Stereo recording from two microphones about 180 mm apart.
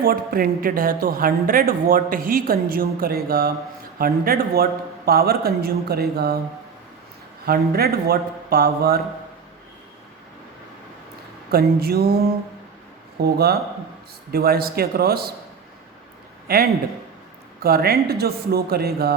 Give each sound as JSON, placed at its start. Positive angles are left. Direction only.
{"t": 0.0, "sound": "a woman's voice", "side_deg": -55}
{"t": 7.4, "sound": "a man's voice", "side_deg": -55}
{"t": 11.5, "sound": "a man's voice", "side_deg": -60}
{"t": 16.5, "sound": "a man's voice", "side_deg": -55}